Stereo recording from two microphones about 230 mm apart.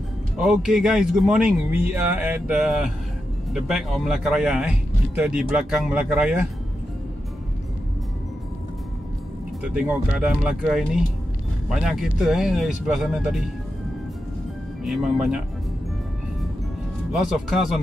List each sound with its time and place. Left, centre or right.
0.4 s speech: centre
9.6 s speech: centre
14.8 s speech: centre
17.1 s speech: centre